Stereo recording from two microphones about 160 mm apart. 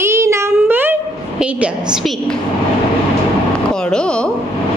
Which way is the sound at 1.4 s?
5° right (ahead or behind).